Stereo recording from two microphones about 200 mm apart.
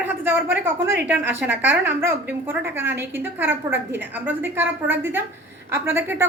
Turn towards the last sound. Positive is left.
turn(degrees=-10)  # may be behind; listen again after turning